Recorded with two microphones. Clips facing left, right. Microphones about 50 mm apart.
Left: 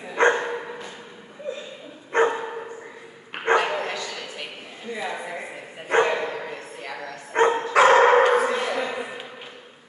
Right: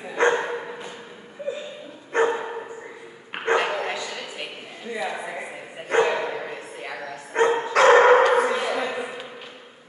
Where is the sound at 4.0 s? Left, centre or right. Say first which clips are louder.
Right 1 dB; centre.